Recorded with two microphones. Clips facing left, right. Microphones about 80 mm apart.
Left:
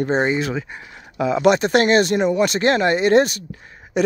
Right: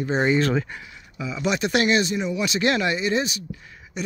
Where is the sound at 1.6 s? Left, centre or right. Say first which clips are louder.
Left 5 dB; left.